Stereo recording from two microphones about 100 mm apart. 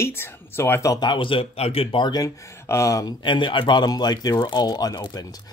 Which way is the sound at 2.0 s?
40° left (ahead or behind).